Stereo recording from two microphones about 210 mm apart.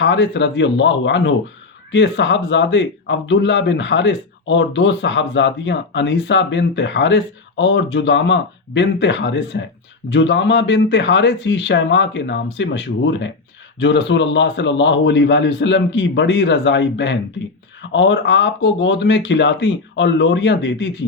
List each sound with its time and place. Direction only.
0.0 s speech: 60° left (ahead or behind)